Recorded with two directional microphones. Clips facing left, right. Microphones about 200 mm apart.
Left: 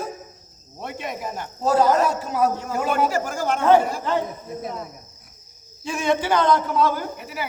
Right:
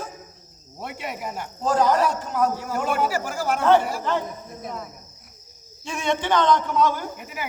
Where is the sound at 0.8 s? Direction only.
10° right (ahead or behind).